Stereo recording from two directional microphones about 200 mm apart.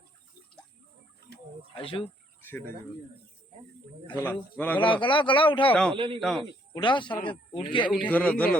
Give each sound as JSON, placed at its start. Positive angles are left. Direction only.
{"t": 1.7, "sound": "speech", "side_deg": 25}
{"t": 4.1, "sound": "a man's voice", "side_deg": 10}
{"t": 4.8, "sound": "speech", "side_deg": 25}
{"t": 5.9, "sound": "speech", "side_deg": -25}
{"t": 6.1, "sound": "speech", "side_deg": 0}
{"t": 6.8, "sound": "speech", "side_deg": 25}
{"t": 8.0, "sound": "a man's voice", "side_deg": 5}